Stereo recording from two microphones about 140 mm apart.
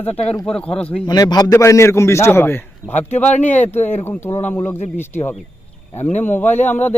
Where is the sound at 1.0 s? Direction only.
30° left (ahead or behind).